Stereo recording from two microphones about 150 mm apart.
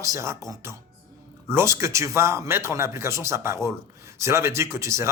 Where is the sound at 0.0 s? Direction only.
20° right (ahead or behind).